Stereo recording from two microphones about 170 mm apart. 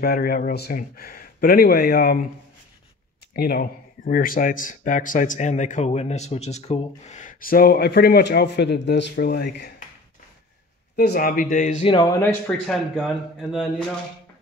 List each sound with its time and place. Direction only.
0.0 s speech: 60° left (ahead or behind)
3.3 s speech: 65° left (ahead or behind)
11.0 s speech: 60° left (ahead or behind); by 11.9 s 45° left (ahead or behind)
12.2 s a man's voice: 10° left (ahead or behind)